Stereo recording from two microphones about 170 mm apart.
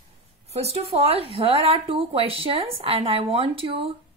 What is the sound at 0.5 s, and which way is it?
Speech, 35° right (ahead or behind).